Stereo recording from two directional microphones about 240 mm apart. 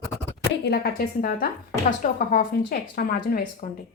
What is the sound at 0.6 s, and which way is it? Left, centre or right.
Speech, left.